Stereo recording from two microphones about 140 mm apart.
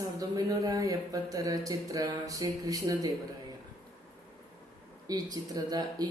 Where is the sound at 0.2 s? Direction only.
25° right (ahead or behind).